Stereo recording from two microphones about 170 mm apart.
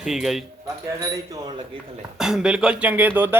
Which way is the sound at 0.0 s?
Centre (ahead or behind).